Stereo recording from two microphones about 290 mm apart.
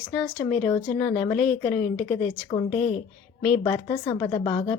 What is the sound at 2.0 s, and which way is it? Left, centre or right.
Speech, left.